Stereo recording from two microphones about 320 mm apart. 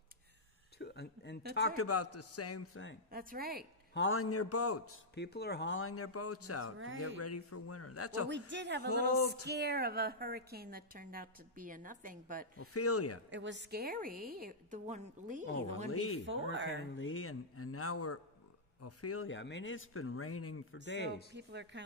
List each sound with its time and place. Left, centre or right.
0.7 s a sound: left
1.5 s a man's voice: left
3.1 s a woman's voice: right
3.9 s a man's voice: left
5.1 s a man's voice: left
8.3 s a woman's voice: right
12.5 s a man's voice: left
13.3 s a woman's voice: right
15.9 s a man's voice: left
21.3 s speech: right